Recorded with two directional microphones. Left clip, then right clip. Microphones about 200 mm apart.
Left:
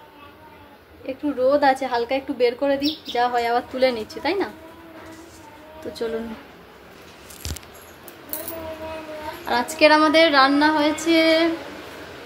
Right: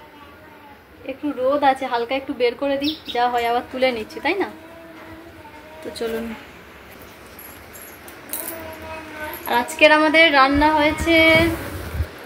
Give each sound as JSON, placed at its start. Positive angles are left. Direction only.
{"t": 1.0, "sound": "female singing", "side_deg": 15}
{"t": 9.5, "sound": "female singing", "side_deg": 15}